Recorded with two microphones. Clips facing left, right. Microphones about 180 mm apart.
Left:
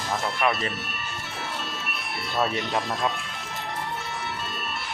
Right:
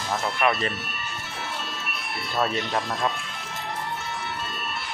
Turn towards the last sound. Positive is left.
turn(degrees=0)  # may be behind; listen again after turning